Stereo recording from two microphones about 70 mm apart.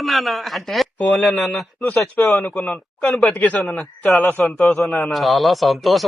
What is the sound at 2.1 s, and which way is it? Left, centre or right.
Speech, left.